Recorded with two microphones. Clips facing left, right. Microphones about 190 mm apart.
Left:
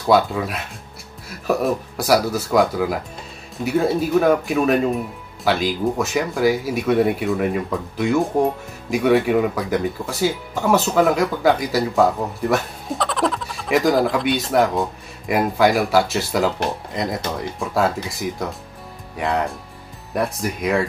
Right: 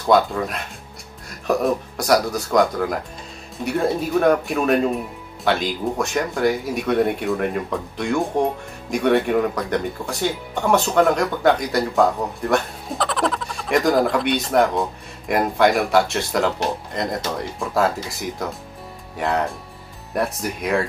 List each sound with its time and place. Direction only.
0.0 s speech: 5° left (ahead or behind)